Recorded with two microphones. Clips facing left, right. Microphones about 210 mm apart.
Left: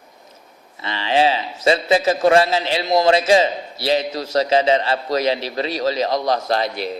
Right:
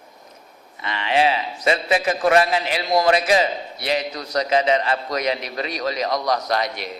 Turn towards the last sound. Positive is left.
turn(degrees=30)  # may be behind; listen again after turning